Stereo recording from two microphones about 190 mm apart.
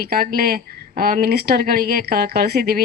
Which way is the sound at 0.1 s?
55° right (ahead or behind).